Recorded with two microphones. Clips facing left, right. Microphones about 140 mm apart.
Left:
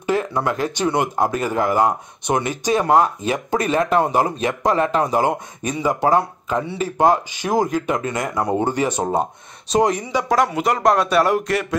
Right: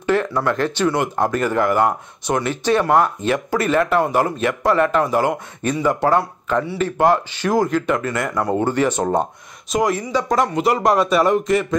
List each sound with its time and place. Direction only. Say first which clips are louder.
0.0 s speech: right 2 dB; 15° left (ahead or behind)
9.7 s speech: left 2 dB; 30° left (ahead or behind)
9.9 s speech: right 1 dB; 15° left (ahead or behind)
10.2 s speech: even; centre (ahead or behind)